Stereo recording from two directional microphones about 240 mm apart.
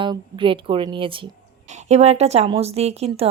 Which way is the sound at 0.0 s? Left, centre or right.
Right.